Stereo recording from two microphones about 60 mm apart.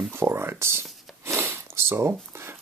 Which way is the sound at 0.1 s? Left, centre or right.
Right.